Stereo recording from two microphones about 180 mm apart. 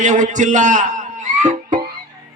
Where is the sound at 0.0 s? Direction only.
45° right (ahead or behind).